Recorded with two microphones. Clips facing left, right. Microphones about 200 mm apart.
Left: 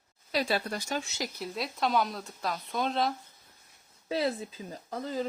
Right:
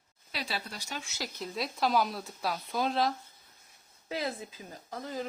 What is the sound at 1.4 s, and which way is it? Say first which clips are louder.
Speech: right 1 dB; centre (ahead or behind).